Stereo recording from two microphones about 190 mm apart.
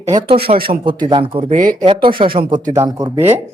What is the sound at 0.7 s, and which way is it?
Speech, 25° right (ahead or behind).